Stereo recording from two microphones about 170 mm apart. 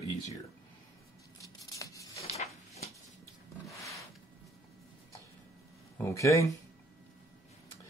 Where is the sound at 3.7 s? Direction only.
20° left (ahead or behind).